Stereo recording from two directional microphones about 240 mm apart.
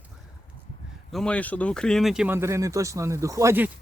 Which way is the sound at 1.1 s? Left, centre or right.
Centre.